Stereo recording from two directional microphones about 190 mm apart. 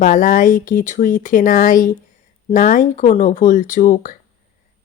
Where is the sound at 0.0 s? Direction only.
45° left (ahead or behind).